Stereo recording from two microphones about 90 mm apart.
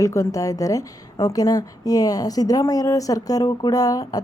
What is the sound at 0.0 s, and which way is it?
A woman's voice, 35° left (ahead or behind).